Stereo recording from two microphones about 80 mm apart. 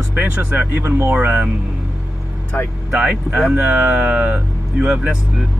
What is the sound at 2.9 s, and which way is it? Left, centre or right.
Speech, centre.